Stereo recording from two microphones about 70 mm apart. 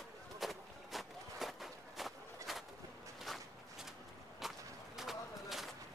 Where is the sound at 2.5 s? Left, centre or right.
Centre.